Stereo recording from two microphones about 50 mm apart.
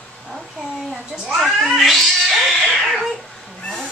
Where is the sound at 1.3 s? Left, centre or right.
Centre.